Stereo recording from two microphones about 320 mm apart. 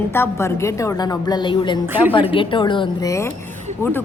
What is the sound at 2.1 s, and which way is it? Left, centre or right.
A woman's voice, centre.